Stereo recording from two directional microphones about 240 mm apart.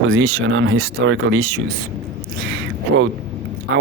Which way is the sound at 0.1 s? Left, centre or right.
Right.